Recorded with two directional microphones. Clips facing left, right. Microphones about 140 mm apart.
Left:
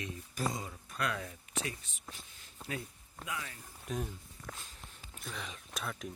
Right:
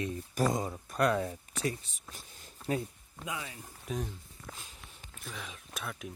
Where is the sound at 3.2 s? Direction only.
25° right (ahead or behind).